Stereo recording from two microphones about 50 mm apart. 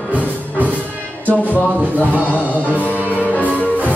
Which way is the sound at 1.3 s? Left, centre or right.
Left.